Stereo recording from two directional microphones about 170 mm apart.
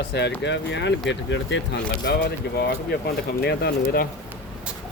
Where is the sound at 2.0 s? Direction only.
70° left (ahead or behind).